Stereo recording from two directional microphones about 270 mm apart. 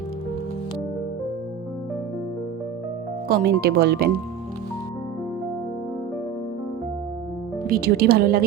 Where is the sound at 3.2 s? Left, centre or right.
Right.